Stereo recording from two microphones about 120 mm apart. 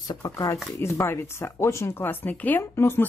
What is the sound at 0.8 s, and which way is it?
Speech, 20° left (ahead or behind).